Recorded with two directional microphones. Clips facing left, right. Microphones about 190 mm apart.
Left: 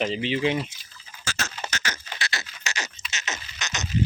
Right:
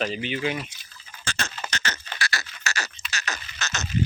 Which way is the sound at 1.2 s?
5° left (ahead or behind).